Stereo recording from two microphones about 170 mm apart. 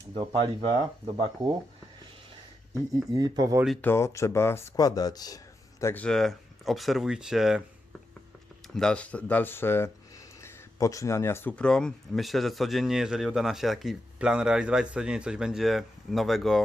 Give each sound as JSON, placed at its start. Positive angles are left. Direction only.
{"t": 0.2, "sound": "speech", "side_deg": -30}
{"t": 2.7, "sound": "speech", "side_deg": -20}
{"t": 3.8, "sound": "speech", "side_deg": 15}
{"t": 5.8, "sound": "speech", "side_deg": 10}
{"t": 8.6, "sound": "speech", "side_deg": 5}